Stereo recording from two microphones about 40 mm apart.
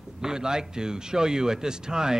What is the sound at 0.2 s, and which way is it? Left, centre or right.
Speech, centre.